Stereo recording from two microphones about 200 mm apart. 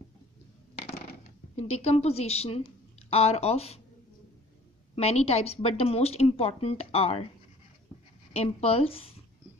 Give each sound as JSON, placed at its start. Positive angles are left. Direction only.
{"t": 1.5, "sound": "a woman's voice", "side_deg": 30}
{"t": 4.9, "sound": "a woman's voice", "side_deg": 30}
{"t": 8.3, "sound": "speech", "side_deg": 30}